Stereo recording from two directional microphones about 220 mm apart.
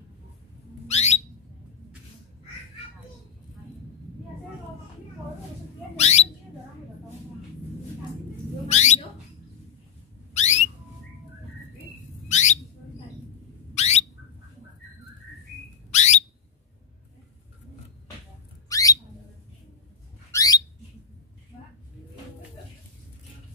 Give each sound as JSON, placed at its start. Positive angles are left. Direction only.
{"t": 0.8, "sound": "a sound", "side_deg": 30}
{"t": 5.9, "sound": "bird", "side_deg": 30}
{"t": 8.6, "sound": "bird", "side_deg": 30}
{"t": 10.3, "sound": "a sound", "side_deg": 30}
{"t": 12.3, "sound": "bird", "side_deg": 30}
{"t": 13.7, "sound": "bird", "side_deg": 30}
{"t": 15.9, "sound": "alarm", "side_deg": 30}
{"t": 18.7, "sound": "bird", "side_deg": 15}
{"t": 20.2, "sound": "bird", "side_deg": 15}